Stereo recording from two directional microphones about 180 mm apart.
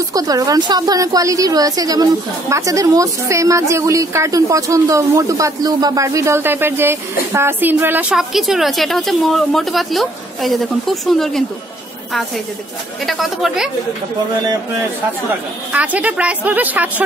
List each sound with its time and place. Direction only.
0.1 s a woman's voice: 20° right (ahead or behind); by 11.4 s centre (ahead or behind)
13.0 s speech: centre (ahead or behind)
15.7 s a woman's voice: 10° right (ahead or behind)